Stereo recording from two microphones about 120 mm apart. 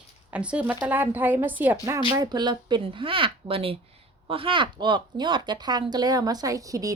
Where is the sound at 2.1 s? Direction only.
35° right (ahead or behind).